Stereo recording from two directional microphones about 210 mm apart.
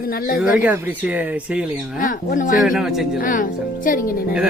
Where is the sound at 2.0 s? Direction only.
40° left (ahead or behind).